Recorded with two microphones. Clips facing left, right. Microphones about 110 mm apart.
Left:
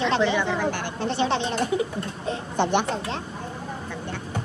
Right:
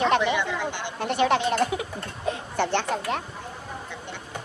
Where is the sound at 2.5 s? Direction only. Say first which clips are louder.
Left 3 dB; 20° left (ahead or behind).